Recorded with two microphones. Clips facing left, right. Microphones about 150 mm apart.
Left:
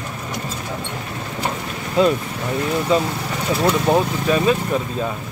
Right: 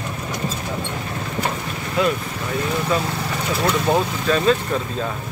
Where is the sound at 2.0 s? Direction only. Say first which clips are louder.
Left 4 dB; 30° left (ahead or behind).